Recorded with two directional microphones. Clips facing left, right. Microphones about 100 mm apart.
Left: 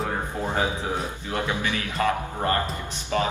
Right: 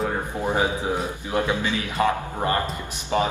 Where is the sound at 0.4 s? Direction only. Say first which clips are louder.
Right 4 dB; 15° right (ahead or behind).